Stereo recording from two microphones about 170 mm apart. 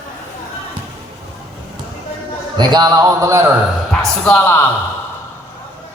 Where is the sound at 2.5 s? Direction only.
25° right (ahead or behind).